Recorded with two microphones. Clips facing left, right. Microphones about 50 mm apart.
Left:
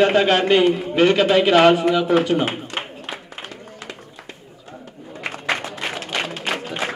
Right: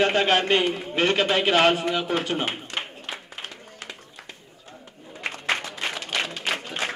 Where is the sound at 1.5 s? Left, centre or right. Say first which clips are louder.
Left 6 dB; left.